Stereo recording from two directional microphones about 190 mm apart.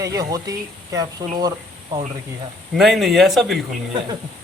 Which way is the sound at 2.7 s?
Centre (ahead or behind).